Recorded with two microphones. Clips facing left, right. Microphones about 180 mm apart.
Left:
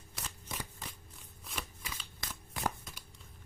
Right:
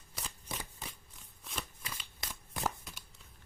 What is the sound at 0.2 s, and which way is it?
Shuffling cards, centre (ahead or behind).